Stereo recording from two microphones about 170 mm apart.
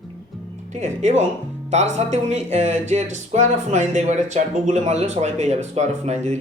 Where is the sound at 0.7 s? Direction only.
45° right (ahead or behind).